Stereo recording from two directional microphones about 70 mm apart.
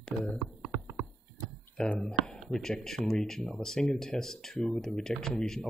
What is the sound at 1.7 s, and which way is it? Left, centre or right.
Speech, centre.